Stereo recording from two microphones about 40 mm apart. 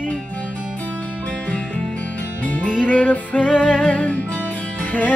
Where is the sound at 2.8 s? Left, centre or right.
Left.